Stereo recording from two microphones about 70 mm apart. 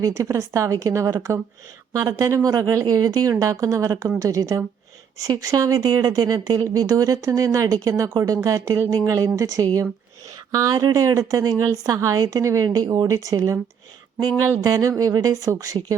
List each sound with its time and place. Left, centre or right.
0.0 s speech: right
10.5 s speech: right
11.0 s speech: right
12.6 s speech: right
14.6 s speech: right